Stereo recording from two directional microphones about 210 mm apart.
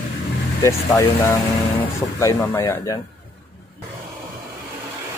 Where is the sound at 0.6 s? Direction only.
15° left (ahead or behind).